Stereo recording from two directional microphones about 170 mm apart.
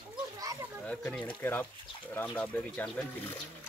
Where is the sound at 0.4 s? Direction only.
20° right (ahead or behind).